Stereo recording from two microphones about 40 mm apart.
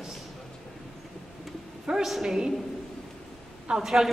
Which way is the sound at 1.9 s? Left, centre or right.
Centre.